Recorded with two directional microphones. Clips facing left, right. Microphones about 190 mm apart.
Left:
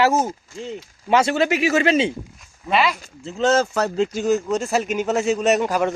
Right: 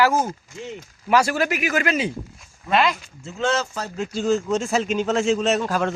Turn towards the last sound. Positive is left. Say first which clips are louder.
# left 3 dB
turn(degrees=15)  # may be behind; listen again after turning